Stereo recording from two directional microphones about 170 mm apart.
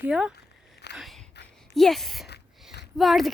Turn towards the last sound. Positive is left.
turn(degrees=0)  # may be behind; listen again after turning